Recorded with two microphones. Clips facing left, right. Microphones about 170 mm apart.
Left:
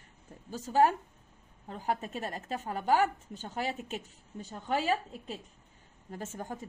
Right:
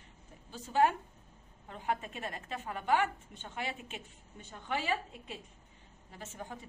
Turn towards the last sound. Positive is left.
turn(degrees=45)  # may be behind; listen again after turning